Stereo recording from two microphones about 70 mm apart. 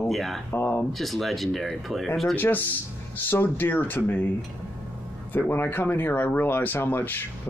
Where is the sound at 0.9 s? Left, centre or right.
Centre.